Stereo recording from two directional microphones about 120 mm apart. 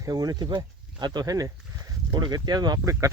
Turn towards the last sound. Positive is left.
turn(degrees=-25)  # may be behind; listen again after turning